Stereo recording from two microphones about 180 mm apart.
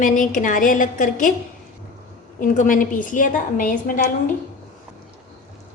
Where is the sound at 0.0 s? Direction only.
45° left (ahead or behind).